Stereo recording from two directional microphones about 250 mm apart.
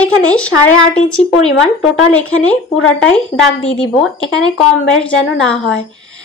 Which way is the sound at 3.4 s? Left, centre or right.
Left.